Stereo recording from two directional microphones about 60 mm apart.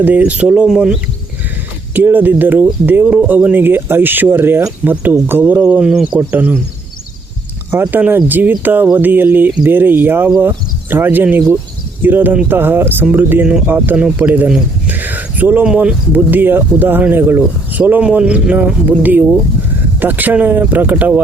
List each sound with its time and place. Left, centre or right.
0.0 s speech: right
1.9 s speech: right
4.8 s speech: right
5.3 s speech: right
7.7 s speech: right
13.9 s speech: right
14.8 s a sound: right
15.6 s speech: centre
16.1 s speech: right
17.7 s a sound: right
18.0 s speech: centre